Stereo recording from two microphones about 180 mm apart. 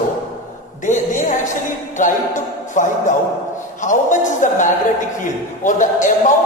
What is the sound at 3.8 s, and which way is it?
Speech, 45° left (ahead or behind).